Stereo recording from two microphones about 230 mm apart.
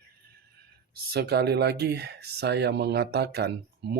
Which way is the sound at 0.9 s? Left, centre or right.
Right.